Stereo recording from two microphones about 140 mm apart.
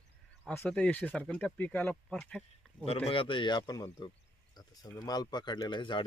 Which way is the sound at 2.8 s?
45° left (ahead or behind).